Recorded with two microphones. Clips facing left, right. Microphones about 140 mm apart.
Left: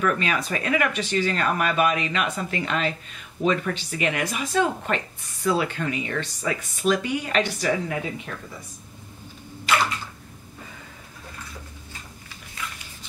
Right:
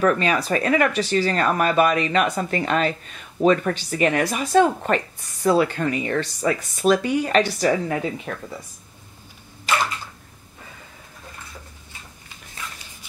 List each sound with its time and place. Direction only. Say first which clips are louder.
0.0 s speech: right 5 dB; 35° right (ahead or behind)